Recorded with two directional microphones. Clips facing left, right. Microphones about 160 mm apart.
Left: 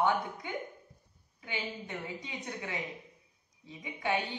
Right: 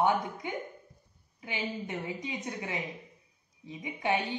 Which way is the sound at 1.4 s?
20° right (ahead or behind).